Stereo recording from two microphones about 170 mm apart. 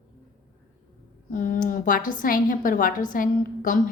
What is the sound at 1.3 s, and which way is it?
A woman's voice, 50° left (ahead or behind).